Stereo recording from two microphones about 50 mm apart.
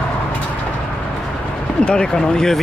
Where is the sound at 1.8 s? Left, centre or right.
Centre.